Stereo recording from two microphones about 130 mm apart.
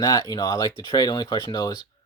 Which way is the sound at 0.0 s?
25° left (ahead or behind).